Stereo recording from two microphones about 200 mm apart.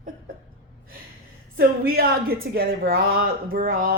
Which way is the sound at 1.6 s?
50° right (ahead or behind).